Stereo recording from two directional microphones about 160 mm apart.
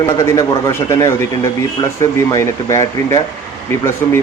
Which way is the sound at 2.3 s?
20° left (ahead or behind).